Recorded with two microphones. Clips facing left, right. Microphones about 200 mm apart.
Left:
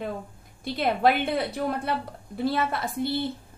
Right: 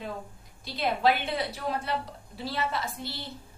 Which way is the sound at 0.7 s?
55° left (ahead or behind).